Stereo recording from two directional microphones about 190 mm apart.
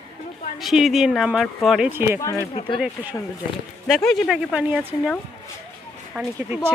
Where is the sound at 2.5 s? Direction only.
30° left (ahead or behind).